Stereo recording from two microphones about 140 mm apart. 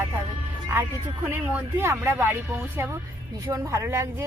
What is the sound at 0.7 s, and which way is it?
Speech, 15° right (ahead or behind).